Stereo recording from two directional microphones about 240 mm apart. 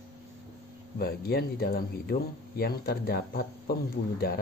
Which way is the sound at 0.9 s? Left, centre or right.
Left.